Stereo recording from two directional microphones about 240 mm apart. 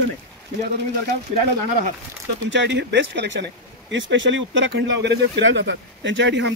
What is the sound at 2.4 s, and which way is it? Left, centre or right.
Speech, right.